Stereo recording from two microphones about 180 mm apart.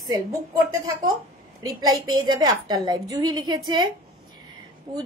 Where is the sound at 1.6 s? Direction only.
20° right (ahead or behind).